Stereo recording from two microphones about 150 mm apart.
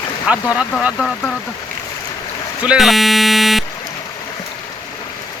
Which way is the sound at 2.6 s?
5° right (ahead or behind).